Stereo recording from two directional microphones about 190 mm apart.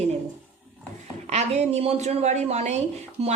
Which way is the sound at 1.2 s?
35° right (ahead or behind).